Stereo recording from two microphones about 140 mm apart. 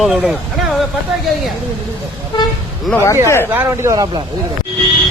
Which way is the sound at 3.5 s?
15° right (ahead or behind).